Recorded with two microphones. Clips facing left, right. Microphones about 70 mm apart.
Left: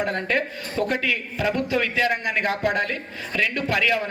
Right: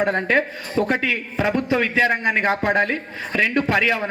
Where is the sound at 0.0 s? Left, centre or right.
Right.